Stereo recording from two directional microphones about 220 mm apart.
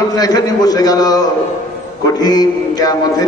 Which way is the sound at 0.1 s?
15° left (ahead or behind).